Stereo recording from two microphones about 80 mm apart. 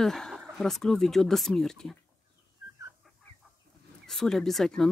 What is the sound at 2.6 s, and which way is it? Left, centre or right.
Chicken, right.